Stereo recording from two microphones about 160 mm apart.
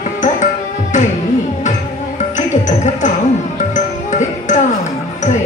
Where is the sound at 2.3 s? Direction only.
50° left (ahead or behind).